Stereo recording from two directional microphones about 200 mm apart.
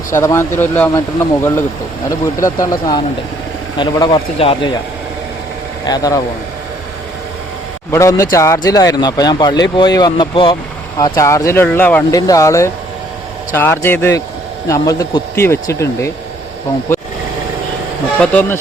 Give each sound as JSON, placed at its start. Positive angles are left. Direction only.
{"t": 0.1, "sound": "speech", "side_deg": 15}
{"t": 2.6, "sound": "a man's voice", "side_deg": 20}
{"t": 5.8, "sound": "speech", "side_deg": 20}
{"t": 7.9, "sound": "speech", "side_deg": 15}
{"t": 18.2, "sound": "speech", "side_deg": 10}